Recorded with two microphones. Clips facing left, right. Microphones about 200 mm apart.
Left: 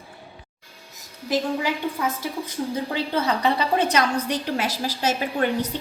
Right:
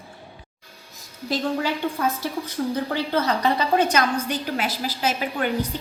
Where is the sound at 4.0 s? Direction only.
35° left (ahead or behind).